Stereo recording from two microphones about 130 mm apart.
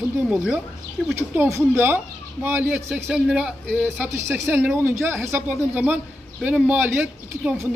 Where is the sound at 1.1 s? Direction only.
20° right (ahead or behind).